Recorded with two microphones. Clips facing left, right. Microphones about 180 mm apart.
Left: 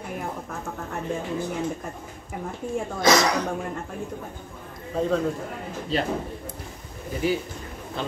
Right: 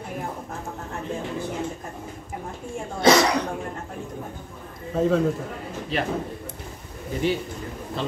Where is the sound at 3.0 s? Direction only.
30° right (ahead or behind).